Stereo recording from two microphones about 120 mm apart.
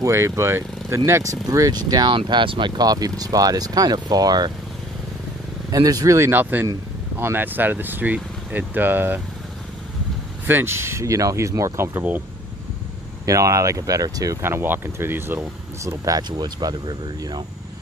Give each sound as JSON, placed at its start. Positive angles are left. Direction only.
{"t": 0.0, "sound": "speech", "side_deg": -25}
{"t": 5.7, "sound": "speech", "side_deg": -30}
{"t": 10.4, "sound": "speech", "side_deg": -20}
{"t": 13.2, "sound": "speech", "side_deg": -25}